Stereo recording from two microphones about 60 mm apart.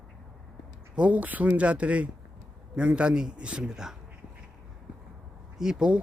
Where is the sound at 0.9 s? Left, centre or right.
Right.